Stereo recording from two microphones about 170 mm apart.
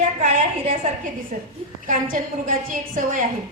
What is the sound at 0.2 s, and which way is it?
Speech, 45° right (ahead or behind).